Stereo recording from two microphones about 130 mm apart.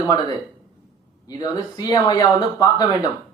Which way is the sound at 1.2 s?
30° left (ahead or behind).